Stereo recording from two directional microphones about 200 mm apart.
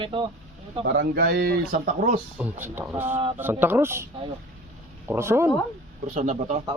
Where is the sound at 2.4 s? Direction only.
10° right (ahead or behind).